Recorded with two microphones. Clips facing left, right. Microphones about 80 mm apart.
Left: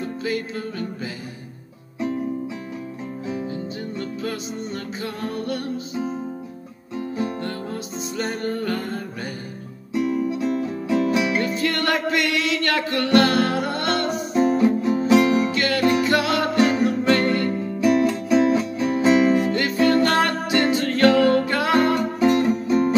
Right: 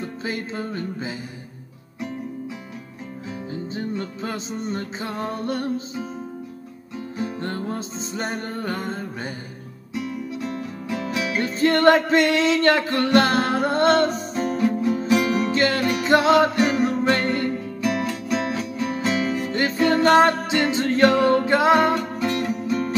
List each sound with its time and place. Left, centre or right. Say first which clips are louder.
0.2 s music: left 2 dB; right
3.7 s music: right 1 dB; right
7.4 s music: right 1 dB; right
9.9 s music: left 7 dB; centre
11.4 s music: right 6 dB; right
14.3 s music: left 4 dB; centre
15.5 s music: left 1 dB; right
17.5 s music: left 5 dB; centre
19.5 s music: left 1 dB; right
22.2 s music: left 6 dB; centre